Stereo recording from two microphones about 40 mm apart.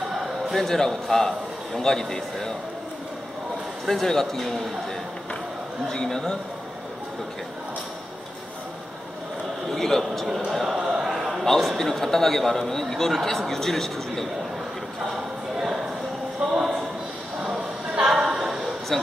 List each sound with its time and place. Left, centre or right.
0.5 s a man's voice: centre
3.8 s a man's voice: centre
5.9 s a man's voice: centre
9.7 s a man's voice: centre
10.5 s speech: centre
10.8 s a sound: centre
11.4 s a man's voice: centre
15.5 s a sound: centre
18.1 s a sound: centre
18.9 s speech: centre